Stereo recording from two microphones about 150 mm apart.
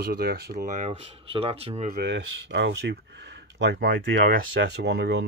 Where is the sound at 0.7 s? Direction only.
55° right (ahead or behind).